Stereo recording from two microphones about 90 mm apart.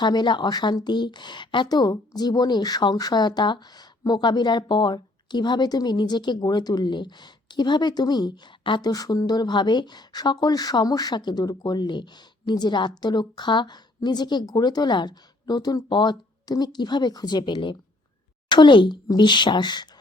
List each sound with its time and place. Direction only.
0.0 s a woman's voice: 55° left (ahead or behind)
8.9 s a woman's voice: 45° left (ahead or behind)